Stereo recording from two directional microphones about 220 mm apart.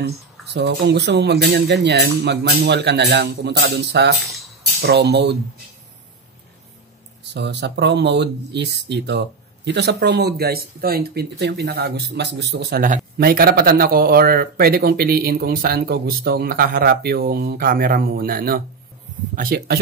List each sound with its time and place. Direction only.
0.0 s speech: 50° right (ahead or behind)
7.3 s speech: 50° right (ahead or behind)